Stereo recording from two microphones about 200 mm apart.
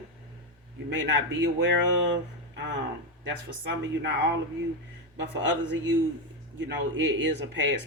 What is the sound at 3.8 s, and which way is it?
Speech, 65° right (ahead or behind).